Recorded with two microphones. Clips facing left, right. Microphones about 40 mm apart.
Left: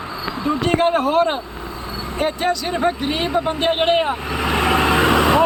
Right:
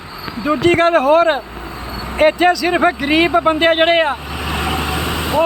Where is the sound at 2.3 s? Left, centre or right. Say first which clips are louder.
Right 7 dB; right.